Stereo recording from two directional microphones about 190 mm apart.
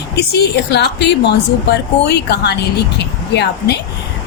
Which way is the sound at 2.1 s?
60° left (ahead or behind).